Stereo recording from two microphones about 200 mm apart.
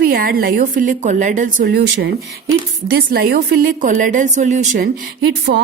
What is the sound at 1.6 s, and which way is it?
A woman's voice, 55° right (ahead or behind).